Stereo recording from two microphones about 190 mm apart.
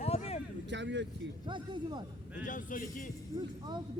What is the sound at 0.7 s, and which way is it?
Speech, 70° right (ahead or behind).